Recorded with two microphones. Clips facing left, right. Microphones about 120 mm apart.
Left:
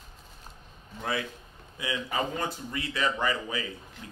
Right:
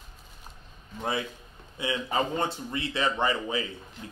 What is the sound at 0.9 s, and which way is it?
Speech, 20° right (ahead or behind).